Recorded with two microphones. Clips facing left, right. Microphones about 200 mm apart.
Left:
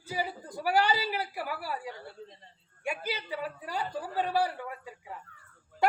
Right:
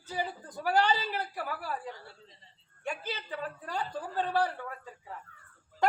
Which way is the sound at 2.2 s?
55° left (ahead or behind).